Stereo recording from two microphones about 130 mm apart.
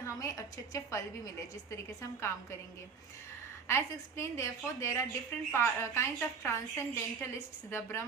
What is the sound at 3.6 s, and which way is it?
A woman's voice, 20° left (ahead or behind).